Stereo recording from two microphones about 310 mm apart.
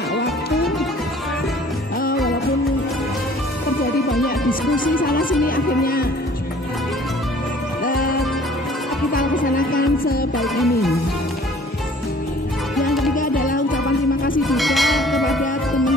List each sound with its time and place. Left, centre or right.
0.1 s music: left
4.7 s speech: left
7.8 s music: left
10.3 s music: centre
12.7 s music: centre
13.1 s music: left
14.4 s church bell: centre